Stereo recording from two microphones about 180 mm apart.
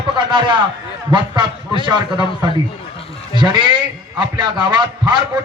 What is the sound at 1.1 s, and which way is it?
Speech, 25° right (ahead or behind).